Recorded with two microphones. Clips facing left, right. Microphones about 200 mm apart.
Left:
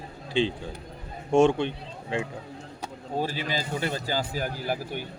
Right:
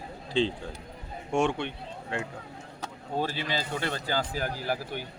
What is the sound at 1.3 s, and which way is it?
Speech, 25° left (ahead or behind).